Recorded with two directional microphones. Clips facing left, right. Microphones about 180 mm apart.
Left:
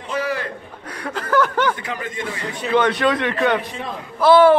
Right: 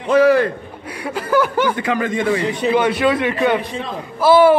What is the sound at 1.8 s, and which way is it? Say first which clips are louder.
Speech: right 9 dB; 90° right.